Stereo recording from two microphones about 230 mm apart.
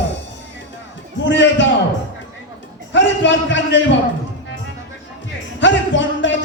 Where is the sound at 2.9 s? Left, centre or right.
Left.